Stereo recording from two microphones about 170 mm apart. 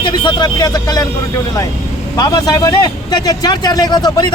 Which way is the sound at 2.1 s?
20° left (ahead or behind).